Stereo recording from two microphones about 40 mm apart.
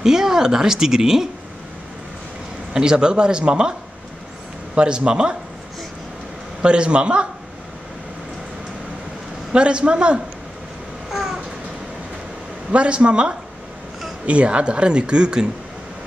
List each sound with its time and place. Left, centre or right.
0.0 s a woman's voice: centre
2.7 s speech: centre
4.7 s speech: right
6.6 s speech: right
9.5 s speech: right
11.1 s cat: centre
12.7 s speech: right